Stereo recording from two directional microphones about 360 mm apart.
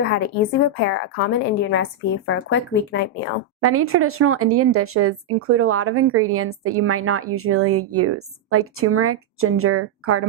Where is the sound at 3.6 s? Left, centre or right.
Right.